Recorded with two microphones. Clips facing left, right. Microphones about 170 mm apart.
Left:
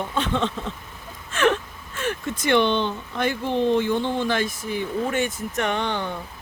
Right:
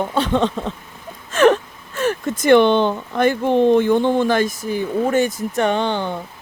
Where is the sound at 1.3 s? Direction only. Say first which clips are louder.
Right 7 dB; 40° right (ahead or behind).